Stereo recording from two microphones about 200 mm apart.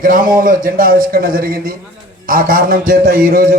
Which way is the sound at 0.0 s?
45° right (ahead or behind).